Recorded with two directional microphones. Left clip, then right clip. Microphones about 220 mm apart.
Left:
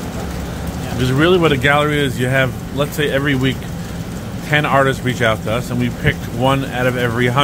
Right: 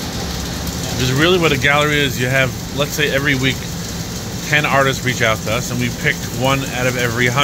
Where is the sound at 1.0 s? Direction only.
20° left (ahead or behind).